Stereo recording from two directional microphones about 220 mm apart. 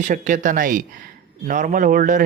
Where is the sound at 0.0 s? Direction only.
35° right (ahead or behind).